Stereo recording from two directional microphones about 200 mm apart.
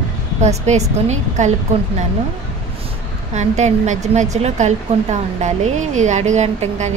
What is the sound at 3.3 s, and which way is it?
A woman's voice, 35° right (ahead or behind).